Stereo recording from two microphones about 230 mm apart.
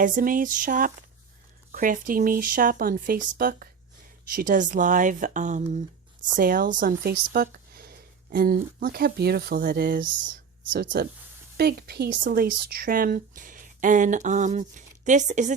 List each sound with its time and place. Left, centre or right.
0.0 s speech: right